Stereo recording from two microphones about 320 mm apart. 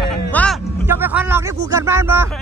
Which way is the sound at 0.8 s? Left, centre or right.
Centre.